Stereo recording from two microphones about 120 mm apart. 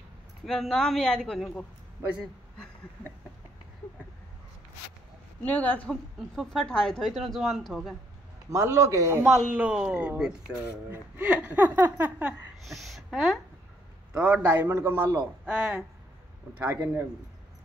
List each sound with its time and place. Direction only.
0.5 s a woman's voice: 5° left (ahead or behind)
2.0 s a man's voice: 25° right (ahead or behind)
5.4 s a woman's voice: 10° left (ahead or behind)
6.3 s a woman's voice: centre (ahead or behind)
8.5 s a man's voice: 25° right (ahead or behind)
9.4 s speech: 10° right (ahead or behind)
12.6 s speech: centre (ahead or behind)